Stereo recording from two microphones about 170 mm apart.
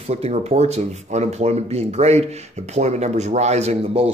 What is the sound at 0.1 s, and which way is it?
Speech, 40° right (ahead or behind).